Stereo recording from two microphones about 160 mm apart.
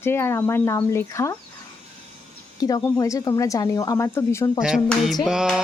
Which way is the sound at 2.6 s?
20° left (ahead or behind).